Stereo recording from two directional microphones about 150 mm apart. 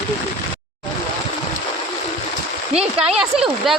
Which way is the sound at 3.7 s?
Centre (ahead or behind).